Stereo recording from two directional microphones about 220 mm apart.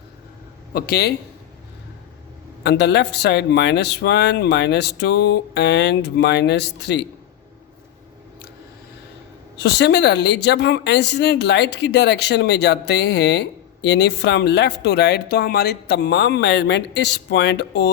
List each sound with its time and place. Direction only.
0.7 s speech: 45° left (ahead or behind)
2.6 s speech: 50° left (ahead or behind)
9.6 s speech: 50° left (ahead or behind)